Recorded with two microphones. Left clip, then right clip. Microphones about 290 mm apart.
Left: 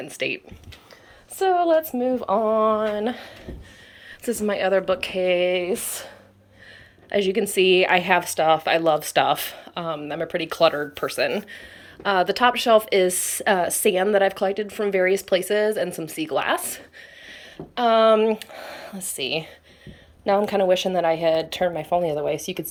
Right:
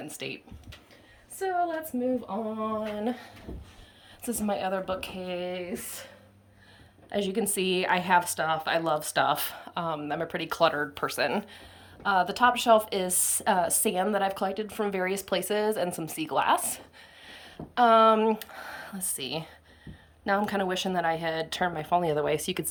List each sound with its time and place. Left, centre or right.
0.0 s speech: centre
1.5 s a woman's voice: centre
7.1 s a woman's voice: centre
22.1 s speech: right